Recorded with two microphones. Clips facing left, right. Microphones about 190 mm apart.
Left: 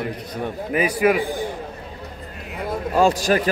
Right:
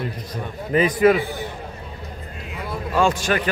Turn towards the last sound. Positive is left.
turn(degrees=35)  # may be behind; listen again after turning